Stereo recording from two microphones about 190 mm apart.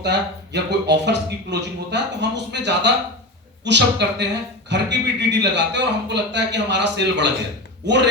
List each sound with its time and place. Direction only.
0.0 s speech: 65° right (ahead or behind)